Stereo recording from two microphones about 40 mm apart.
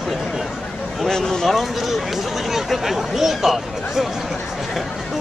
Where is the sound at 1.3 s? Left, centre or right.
Centre.